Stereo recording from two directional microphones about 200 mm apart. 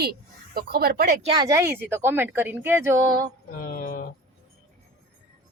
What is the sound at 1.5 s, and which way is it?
A woman's voice, 15° right (ahead or behind).